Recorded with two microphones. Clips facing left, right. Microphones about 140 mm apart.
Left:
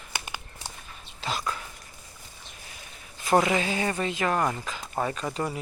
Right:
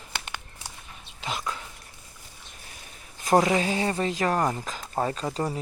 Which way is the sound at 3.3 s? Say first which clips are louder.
Right 2 dB; 35° right (ahead or behind).